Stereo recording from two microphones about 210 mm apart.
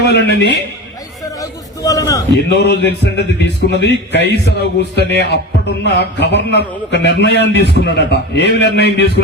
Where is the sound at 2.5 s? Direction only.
55° left (ahead or behind).